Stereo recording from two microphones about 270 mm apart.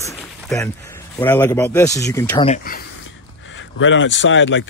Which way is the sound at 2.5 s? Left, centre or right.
Left.